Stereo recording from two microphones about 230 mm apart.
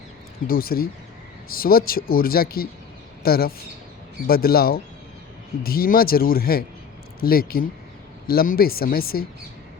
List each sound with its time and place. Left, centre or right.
0.4 s speech: left